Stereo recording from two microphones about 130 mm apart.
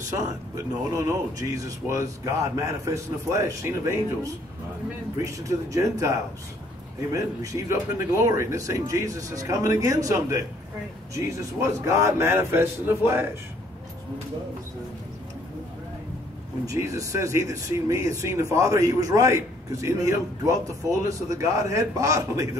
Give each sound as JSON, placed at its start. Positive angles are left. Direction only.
{"t": 0.1, "sound": "speech", "side_deg": -25}
{"t": 8.2, "sound": "speech", "side_deg": -25}
{"t": 16.6, "sound": "speech", "side_deg": -25}